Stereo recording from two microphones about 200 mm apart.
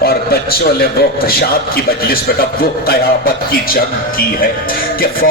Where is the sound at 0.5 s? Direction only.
50° left (ahead or behind).